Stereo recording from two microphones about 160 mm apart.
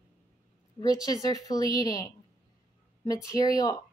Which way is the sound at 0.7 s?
25° left (ahead or behind).